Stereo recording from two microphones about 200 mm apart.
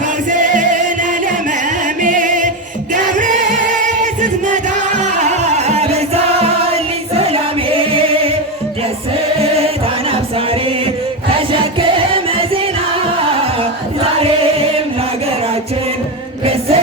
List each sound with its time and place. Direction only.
0.3 s music: 40° right (ahead or behind)
2.0 s music: 40° right (ahead or behind)
13.6 s choir: 30° right (ahead or behind)
16.5 s choir: 30° right (ahead or behind)